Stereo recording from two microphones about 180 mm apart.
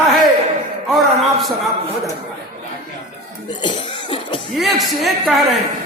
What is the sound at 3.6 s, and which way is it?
Cough, 30° left (ahead or behind).